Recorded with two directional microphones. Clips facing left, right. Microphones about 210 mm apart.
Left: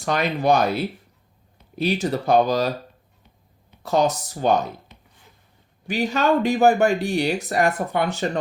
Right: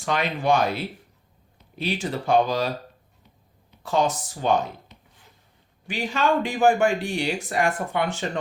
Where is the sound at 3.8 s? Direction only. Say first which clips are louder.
Left 3 dB; 40° left (ahead or behind).